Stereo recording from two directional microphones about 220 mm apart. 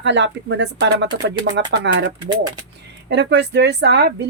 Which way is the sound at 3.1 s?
50° right (ahead or behind).